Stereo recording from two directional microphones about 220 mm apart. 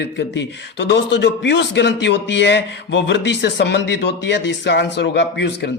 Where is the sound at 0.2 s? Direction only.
50° left (ahead or behind).